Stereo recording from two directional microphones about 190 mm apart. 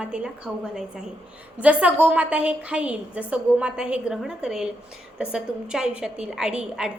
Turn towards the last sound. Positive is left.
turn(degrees=-5)  # may be behind; listen again after turning